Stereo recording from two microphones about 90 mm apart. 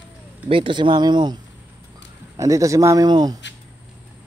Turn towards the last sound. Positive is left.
turn(degrees=-50)  # may be behind; listen again after turning